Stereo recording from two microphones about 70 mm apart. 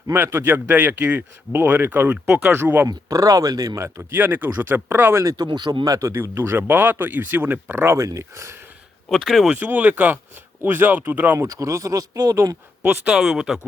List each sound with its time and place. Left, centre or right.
0.1 s speech: right
3.1 s speech: right
3.8 s a man's voice: right
4.1 s speech: right
5.2 s speech: right
5.5 s speech: right
6.1 s speech: right
7.9 s a man's voice: right
9.0 s speech: centre
9.6 s speech: right
11.3 s a man's voice: right
13.1 s speech: centre